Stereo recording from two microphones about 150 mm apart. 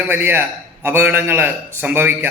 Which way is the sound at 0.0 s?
10° right (ahead or behind).